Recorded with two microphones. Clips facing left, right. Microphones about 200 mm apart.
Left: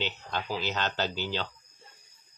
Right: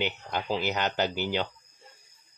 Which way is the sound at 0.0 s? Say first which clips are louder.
Right 3 dB; 15° right (ahead or behind).